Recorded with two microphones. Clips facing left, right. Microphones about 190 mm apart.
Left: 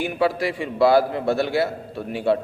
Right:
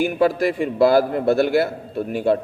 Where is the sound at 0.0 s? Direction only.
45° right (ahead or behind).